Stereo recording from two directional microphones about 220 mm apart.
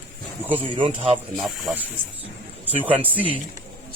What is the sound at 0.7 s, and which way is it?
Speech, 25° right (ahead or behind).